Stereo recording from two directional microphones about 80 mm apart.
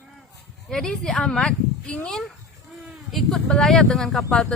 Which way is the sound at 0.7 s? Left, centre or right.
Centre.